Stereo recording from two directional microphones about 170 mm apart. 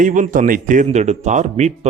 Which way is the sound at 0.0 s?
50° right (ahead or behind).